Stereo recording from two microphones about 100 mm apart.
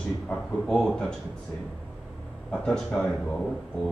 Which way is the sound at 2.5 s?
10° left (ahead or behind).